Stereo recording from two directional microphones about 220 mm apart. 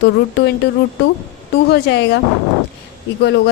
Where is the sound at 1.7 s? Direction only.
50° left (ahead or behind).